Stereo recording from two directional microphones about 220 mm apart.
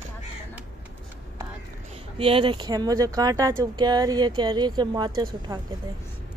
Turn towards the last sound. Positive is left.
turn(degrees=-15)  # may be behind; listen again after turning